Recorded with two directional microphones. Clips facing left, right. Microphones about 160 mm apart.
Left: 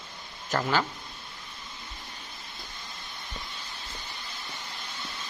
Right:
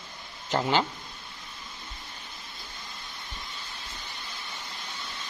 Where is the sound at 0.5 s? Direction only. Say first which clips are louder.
Right 2 dB; 20° right (ahead or behind).